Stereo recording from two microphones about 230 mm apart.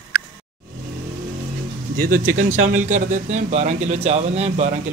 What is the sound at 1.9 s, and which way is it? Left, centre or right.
Speech, right.